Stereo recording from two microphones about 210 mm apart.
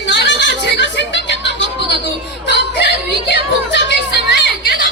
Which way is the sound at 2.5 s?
55° left (ahead or behind).